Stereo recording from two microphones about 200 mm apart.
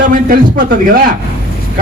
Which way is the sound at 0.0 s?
45° right (ahead or behind).